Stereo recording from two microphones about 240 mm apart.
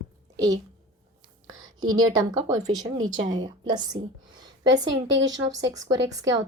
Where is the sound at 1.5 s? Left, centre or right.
Right.